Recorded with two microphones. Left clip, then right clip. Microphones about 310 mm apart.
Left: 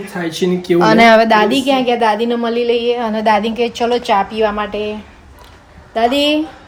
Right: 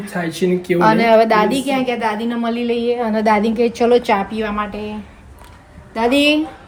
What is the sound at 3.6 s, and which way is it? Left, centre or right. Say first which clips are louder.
Speech: right 1 dB; left.